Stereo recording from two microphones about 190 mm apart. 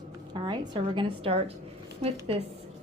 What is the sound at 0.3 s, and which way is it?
A woman's voice, 25° right (ahead or behind).